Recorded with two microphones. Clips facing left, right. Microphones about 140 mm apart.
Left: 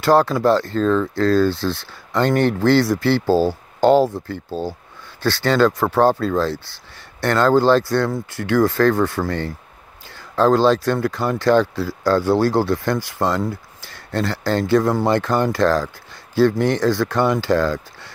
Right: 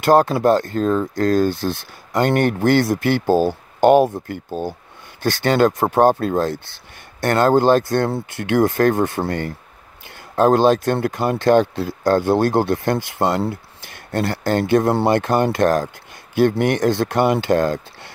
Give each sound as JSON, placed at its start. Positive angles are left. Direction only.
{"t": 0.0, "sound": "speech", "side_deg": -20}
{"t": 10.4, "sound": "speech", "side_deg": -20}